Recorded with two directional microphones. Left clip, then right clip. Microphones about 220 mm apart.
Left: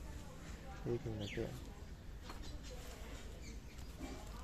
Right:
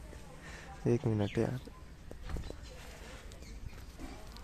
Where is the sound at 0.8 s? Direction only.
45° right (ahead or behind).